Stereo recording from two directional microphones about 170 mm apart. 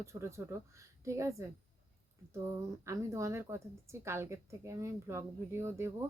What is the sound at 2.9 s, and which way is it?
A woman's voice, 15° right (ahead or behind).